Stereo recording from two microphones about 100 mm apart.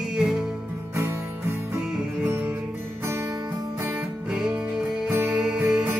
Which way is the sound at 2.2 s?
15° right (ahead or behind).